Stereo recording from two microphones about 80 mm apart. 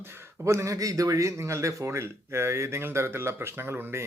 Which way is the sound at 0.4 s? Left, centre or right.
Right.